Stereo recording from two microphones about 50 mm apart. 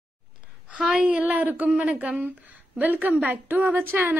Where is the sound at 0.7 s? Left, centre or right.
Centre.